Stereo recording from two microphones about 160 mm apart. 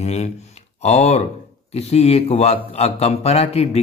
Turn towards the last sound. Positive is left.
turn(degrees=40)  # may be behind; listen again after turning